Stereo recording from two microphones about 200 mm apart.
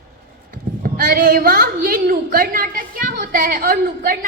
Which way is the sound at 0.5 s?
45° right (ahead or behind).